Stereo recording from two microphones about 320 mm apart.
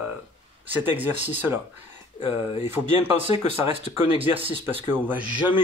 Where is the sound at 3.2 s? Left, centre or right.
Centre.